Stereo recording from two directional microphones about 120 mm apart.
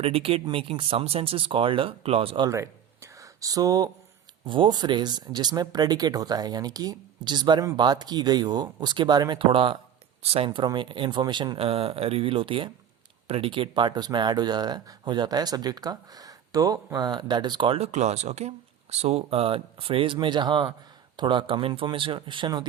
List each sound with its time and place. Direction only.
0.0 s speech: 55° right (ahead or behind)
2.5 s a sound: 25° right (ahead or behind)
4.4 s speech: 40° right (ahead or behind)
17.7 s speech: 65° right (ahead or behind); by 22.6 s 40° right (ahead or behind)